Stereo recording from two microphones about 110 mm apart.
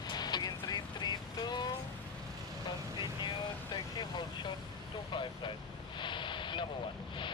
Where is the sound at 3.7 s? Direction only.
45° left (ahead or behind).